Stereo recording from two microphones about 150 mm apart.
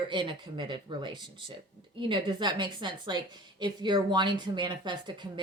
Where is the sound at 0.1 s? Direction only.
35° right (ahead or behind).